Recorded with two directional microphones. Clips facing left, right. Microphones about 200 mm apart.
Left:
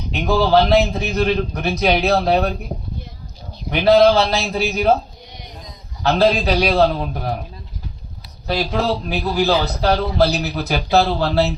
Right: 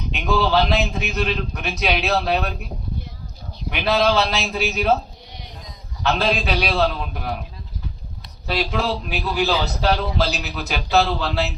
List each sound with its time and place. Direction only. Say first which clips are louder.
0.1 s a man's voice: left 4 dB; 35° left (ahead or behind)
3.7 s a man's voice: left 7 dB; 35° left (ahead or behind)
6.1 s a man's voice: left 5 dB; 35° left (ahead or behind)
8.4 s a man's voice: left 3 dB; 40° left (ahead or behind)
9.8 s a man's voice: left 5 dB; 55° left (ahead or behind)
10.4 s a man's voice: left 6 dB; 35° left (ahead or behind)